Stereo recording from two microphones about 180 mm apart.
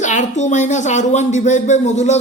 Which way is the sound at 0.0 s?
40° left (ahead or behind).